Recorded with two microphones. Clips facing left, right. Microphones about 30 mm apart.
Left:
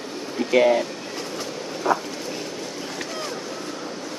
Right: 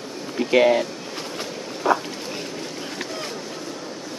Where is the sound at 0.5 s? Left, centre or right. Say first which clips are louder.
Right 1 dB; centre.